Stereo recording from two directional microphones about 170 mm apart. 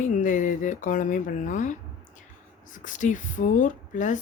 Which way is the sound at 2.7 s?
50° left (ahead or behind).